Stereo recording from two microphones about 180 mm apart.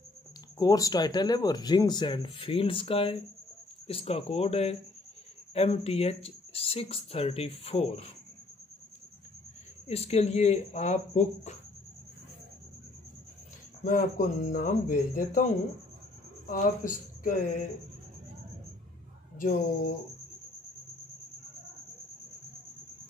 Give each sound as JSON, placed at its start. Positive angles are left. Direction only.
{"t": 0.6, "sound": "speech", "side_deg": 20}
{"t": 9.8, "sound": "speech", "side_deg": 35}
{"t": 13.8, "sound": "speech", "side_deg": 45}
{"t": 16.4, "sound": "speech", "side_deg": 45}
{"t": 19.3, "sound": "speech", "side_deg": 45}